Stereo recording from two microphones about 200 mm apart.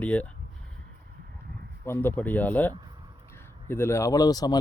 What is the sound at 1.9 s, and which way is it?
A man's voice, 10° left (ahead or behind).